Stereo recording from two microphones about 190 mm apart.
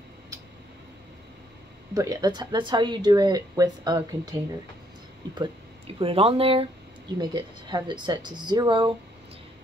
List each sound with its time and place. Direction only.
2.0 s speech: 20° right (ahead or behind)